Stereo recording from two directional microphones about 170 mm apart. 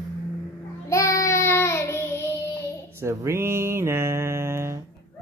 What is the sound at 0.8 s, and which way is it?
Child singing, 15° left (ahead or behind).